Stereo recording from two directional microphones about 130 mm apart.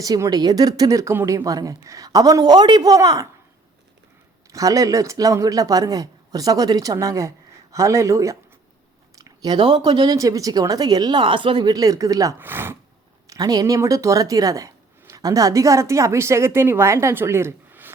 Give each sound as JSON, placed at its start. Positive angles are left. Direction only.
{"t": 0.0, "sound": "a man's voice", "side_deg": -30}
{"t": 4.5, "sound": "a man's voice", "side_deg": -25}
{"t": 13.2, "sound": "speech", "side_deg": -25}